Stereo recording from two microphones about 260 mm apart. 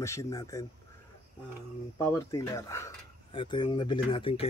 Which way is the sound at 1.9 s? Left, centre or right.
Centre.